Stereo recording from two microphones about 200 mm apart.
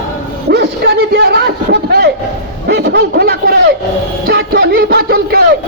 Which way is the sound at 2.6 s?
55° right (ahead or behind).